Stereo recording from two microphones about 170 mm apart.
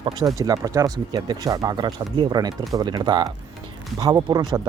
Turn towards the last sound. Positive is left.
turn(degrees=-25)  # may be behind; listen again after turning